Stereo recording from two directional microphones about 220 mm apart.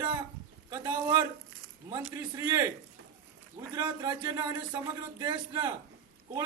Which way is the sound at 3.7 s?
20° right (ahead or behind).